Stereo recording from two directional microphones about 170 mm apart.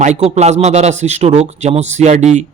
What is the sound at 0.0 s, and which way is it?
Speech, 40° right (ahead or behind).